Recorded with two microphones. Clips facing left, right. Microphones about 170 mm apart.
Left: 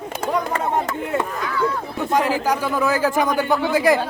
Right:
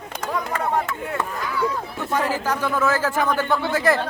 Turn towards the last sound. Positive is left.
turn(degrees=15)  # may be behind; listen again after turning